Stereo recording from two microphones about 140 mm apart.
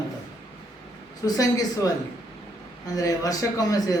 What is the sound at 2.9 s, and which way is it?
A man's voice, 25° left (ahead or behind).